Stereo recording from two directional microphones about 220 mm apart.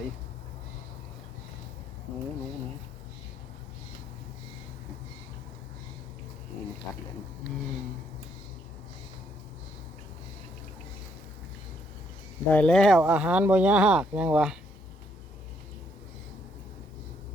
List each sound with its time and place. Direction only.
12.5 s speech: 5° left (ahead or behind)